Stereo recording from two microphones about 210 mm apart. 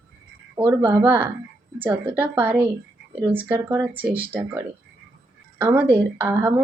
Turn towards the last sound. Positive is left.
turn(degrees=-10)  # may be behind; listen again after turning